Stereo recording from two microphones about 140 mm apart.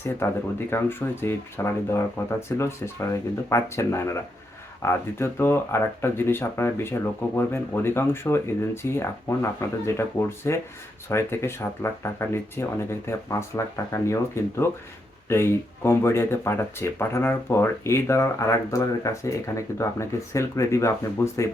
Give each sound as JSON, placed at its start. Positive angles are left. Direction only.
{"t": 0.7, "sound": "speech", "side_deg": 15}